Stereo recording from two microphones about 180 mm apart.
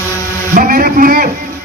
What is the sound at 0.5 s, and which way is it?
Speech, 50° right (ahead or behind).